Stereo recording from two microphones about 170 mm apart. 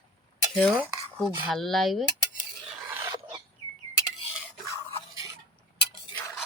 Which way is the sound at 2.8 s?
10° right (ahead or behind).